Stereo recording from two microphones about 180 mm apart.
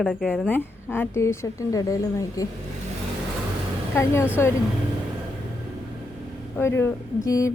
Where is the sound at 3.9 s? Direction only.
15° left (ahead or behind).